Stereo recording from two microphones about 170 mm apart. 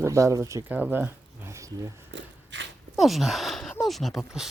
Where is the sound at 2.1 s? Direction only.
90° right.